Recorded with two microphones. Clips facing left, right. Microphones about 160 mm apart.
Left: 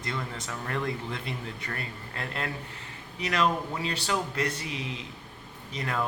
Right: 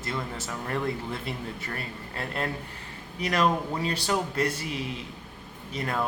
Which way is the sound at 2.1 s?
35° right (ahead or behind).